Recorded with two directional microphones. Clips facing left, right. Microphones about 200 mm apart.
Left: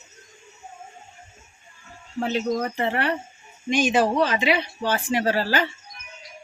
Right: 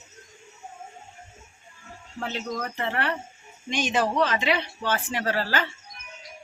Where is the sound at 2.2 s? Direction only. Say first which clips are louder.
Left 7 dB; 15° left (ahead or behind).